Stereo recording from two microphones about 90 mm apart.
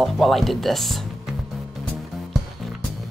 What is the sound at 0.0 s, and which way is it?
Speech, centre (ahead or behind).